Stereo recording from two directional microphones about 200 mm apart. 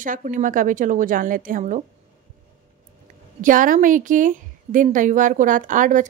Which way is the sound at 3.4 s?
40° right (ahead or behind).